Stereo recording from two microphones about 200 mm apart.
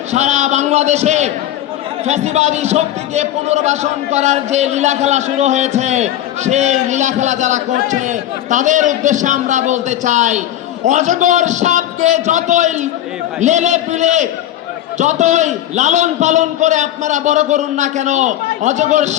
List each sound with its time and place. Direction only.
0.1 s a man's voice: 35° right (ahead or behind)